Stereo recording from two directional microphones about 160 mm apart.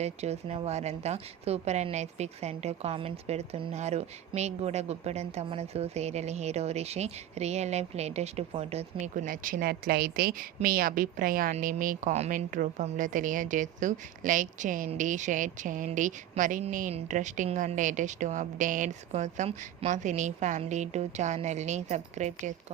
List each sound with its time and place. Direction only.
0.0 s a woman's voice: 40° right (ahead or behind)
9.2 s a woman's voice: 60° right (ahead or behind)